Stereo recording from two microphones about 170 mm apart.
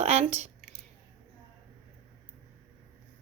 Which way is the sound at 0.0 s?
40° right (ahead or behind).